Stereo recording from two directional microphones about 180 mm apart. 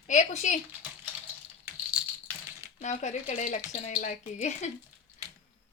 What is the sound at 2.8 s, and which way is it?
A woman's voice, 40° left (ahead or behind).